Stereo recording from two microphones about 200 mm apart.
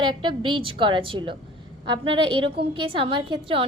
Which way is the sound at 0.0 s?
25° right (ahead or behind).